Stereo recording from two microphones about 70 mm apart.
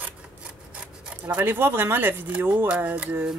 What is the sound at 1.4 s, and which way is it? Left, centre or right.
Speech, right.